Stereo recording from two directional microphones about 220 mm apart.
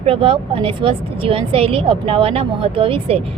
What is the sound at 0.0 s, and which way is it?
Speech, 25° right (ahead or behind).